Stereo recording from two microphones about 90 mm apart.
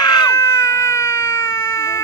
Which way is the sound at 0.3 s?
35° left (ahead or behind).